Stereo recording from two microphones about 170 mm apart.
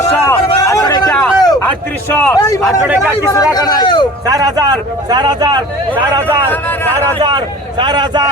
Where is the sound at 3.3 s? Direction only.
20° left (ahead or behind).